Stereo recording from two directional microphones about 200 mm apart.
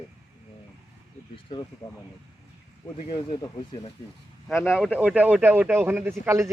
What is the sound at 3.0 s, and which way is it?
Speech, 35° left (ahead or behind).